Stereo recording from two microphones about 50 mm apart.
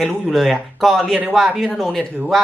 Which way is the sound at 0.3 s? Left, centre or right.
Centre.